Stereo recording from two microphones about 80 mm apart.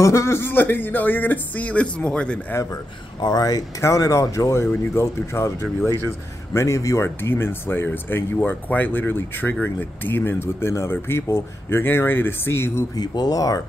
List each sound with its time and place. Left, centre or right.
0.0 s speech: left; by 2.4 s centre
2.5 s speech: left
3.2 s speech: left
3.8 s speech: left
7.2 s speech: left
12.9 s speech: left